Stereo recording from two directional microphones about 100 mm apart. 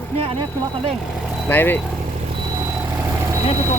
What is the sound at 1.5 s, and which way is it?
Speech, 20° left (ahead or behind).